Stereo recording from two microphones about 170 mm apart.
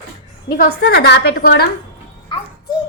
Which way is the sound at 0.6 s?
75° left (ahead or behind).